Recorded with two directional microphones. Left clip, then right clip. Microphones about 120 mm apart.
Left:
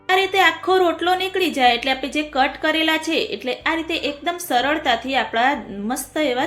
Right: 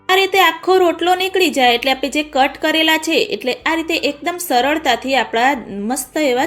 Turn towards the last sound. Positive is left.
turn(degrees=-40)  # may be behind; listen again after turning